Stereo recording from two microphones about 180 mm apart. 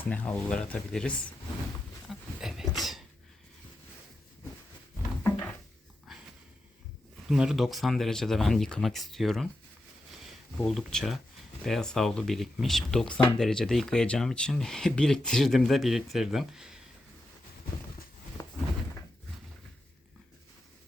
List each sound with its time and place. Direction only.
0.0 s speech: 10° left (ahead or behind)
2.0 s a sound: centre (ahead or behind)
5.2 s cupboard open or close: 10° left (ahead or behind)
7.3 s speech: centre (ahead or behind)
10.6 s speech: centre (ahead or behind)
18.4 s a sound: 20° left (ahead or behind)